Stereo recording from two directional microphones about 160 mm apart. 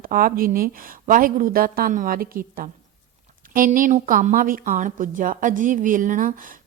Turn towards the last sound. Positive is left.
turn(degrees=-55)  # may be behind; listen again after turning